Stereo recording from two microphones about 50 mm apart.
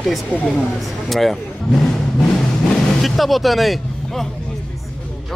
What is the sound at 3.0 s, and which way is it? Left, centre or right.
Speech, centre.